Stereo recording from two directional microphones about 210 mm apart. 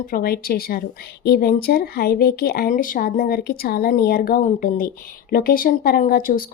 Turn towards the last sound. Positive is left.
turn(degrees=45)  # may be behind; listen again after turning